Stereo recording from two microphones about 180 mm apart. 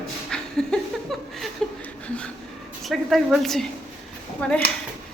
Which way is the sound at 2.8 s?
Centre (ahead or behind).